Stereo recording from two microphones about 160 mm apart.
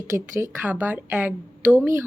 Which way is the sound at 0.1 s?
15° right (ahead or behind).